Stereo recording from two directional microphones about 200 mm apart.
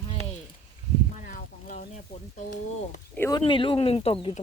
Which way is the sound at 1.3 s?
40° left (ahead or behind).